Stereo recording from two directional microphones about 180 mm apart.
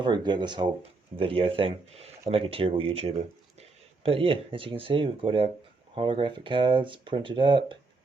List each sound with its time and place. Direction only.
0.0 s speech: 25° right (ahead or behind)